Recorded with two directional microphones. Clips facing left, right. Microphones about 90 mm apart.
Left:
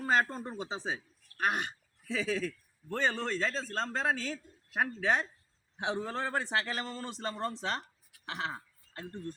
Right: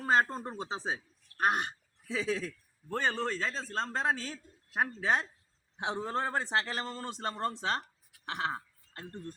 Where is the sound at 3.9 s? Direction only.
30° right (ahead or behind).